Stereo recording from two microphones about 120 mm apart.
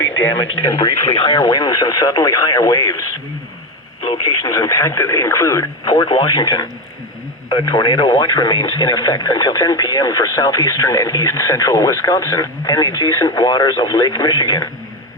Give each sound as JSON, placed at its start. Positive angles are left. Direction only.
{"t": 0.1, "sound": "radio", "side_deg": 20}
{"t": 0.8, "sound": "speech", "side_deg": 40}